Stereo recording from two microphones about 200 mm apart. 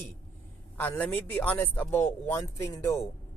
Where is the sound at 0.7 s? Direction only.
10° left (ahead or behind).